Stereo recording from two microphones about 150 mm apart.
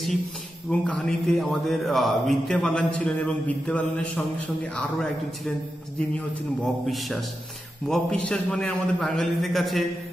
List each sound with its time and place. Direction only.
0.7 s a man's voice: 5° left (ahead or behind)
6.9 s a man's voice: centre (ahead or behind)